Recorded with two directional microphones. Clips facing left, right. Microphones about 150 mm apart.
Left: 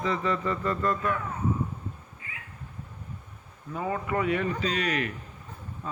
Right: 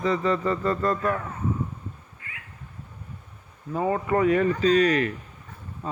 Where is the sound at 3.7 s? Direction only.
40° right (ahead or behind).